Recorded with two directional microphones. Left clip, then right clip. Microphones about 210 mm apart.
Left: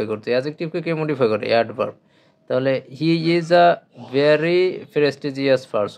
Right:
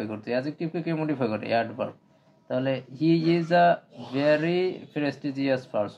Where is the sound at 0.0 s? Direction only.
55° left (ahead or behind).